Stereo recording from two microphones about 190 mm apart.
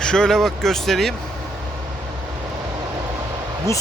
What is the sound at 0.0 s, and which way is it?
Speech, 5° left (ahead or behind).